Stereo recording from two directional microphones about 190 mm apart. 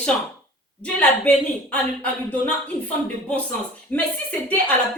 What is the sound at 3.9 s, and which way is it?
Speech, 10° left (ahead or behind).